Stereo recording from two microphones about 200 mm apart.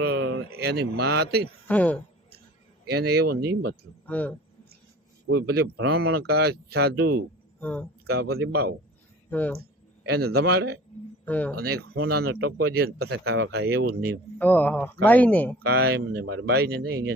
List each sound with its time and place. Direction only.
0.0 s a man's voice: 60° right (ahead or behind)
1.6 s speech: 5° left (ahead or behind)
2.8 s speech: 55° right (ahead or behind)
4.0 s a man's voice: 5° left (ahead or behind)
5.3 s speech: 55° right (ahead or behind)
7.6 s speech: 5° left (ahead or behind)
8.0 s speech: 55° right (ahead or behind)
10.0 s speech: 55° right (ahead or behind)
11.3 s speech: 5° left (ahead or behind)
11.5 s speech: 50° right (ahead or behind)
14.3 s speech: 10° left (ahead or behind)
15.6 s speech: 50° right (ahead or behind)
16.2 s speech: 65° right (ahead or behind)